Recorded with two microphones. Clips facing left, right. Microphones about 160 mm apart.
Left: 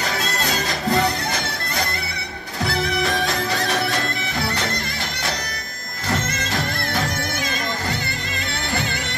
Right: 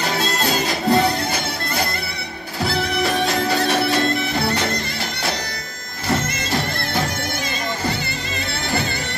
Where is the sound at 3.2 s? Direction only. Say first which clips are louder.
Right 4 dB; 20° right (ahead or behind).